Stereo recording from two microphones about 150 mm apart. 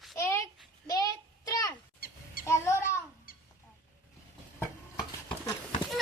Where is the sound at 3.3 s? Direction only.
75° left (ahead or behind).